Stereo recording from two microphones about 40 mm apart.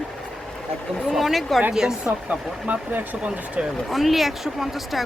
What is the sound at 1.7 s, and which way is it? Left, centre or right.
Speech, centre.